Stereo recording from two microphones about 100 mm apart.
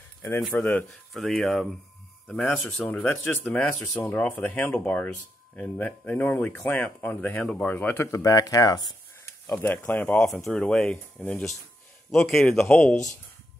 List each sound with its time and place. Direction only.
0.6 s a man's voice: 20° left (ahead or behind)
1.1 s speech: 5° left (ahead or behind)
2.3 s a man's voice: 20° left (ahead or behind)
8.1 s speech: 35° left (ahead or behind)
9.2 s speech: 25° left (ahead or behind)
10.4 s speech: 5° left (ahead or behind)
12.1 s speech: 5° left (ahead or behind)